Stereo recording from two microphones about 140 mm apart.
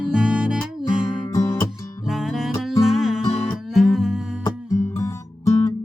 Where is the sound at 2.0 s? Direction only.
Centre (ahead or behind).